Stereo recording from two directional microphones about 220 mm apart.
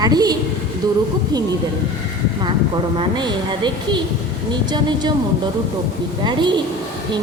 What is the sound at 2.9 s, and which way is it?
A woman's voice, 20° right (ahead or behind).